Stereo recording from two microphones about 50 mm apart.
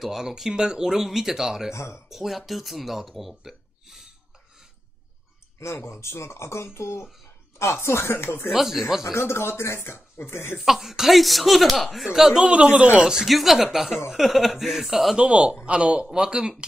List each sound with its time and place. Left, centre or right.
0.0 s speech: centre
1.7 s speech: left
2.0 s speech: centre
5.6 s speech: left
8.5 s speech: centre
9.1 s speech: left
10.6 s speech: centre
12.1 s speech: centre
12.7 s speech: right
13.0 s speech: centre
13.3 s speech: centre
15.1 s speech: right